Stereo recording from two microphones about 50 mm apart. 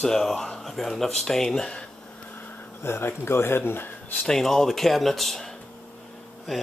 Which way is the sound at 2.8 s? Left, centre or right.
Left.